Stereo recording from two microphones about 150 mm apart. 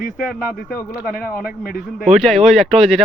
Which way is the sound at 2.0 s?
Centre (ahead or behind).